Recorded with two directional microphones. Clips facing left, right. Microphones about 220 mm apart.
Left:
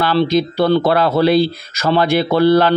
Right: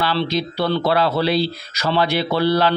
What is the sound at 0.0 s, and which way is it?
Speech, 50° left (ahead or behind).